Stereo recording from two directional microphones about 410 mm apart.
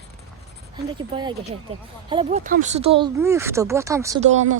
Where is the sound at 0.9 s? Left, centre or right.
Centre.